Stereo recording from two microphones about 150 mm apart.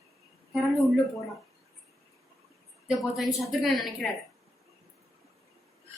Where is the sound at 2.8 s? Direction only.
Centre (ahead or behind).